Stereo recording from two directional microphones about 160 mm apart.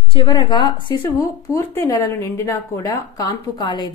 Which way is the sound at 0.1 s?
30° left (ahead or behind).